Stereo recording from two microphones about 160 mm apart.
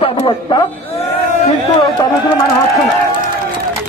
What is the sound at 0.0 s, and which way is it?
A man's voice, 35° left (ahead or behind).